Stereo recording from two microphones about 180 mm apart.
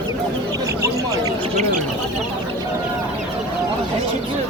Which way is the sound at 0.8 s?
20° right (ahead or behind).